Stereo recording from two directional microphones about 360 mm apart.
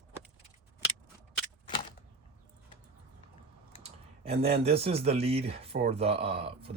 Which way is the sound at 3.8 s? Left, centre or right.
Centre.